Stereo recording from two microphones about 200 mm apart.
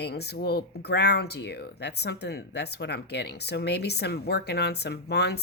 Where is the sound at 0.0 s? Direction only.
55° left (ahead or behind).